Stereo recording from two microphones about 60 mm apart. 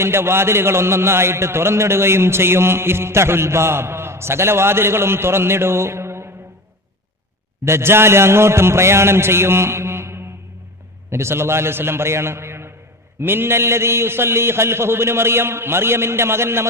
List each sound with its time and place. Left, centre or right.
0.0 s a man's voice: right
7.6 s a man's voice: right